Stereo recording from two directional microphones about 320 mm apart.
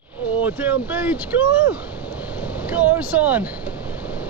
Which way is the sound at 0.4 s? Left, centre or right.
Centre.